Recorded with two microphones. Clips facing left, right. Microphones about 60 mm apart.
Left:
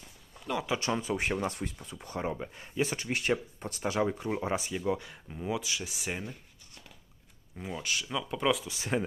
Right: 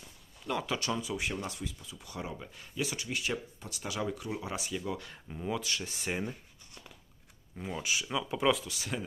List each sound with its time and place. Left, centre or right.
0.7 s speech: left
5.0 s speech: centre
7.5 s speech: centre
8.6 s speech: left